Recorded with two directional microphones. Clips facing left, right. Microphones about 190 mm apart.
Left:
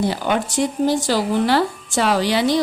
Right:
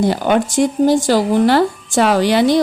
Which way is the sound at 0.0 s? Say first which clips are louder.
Right 5 dB; 50° right (ahead or behind).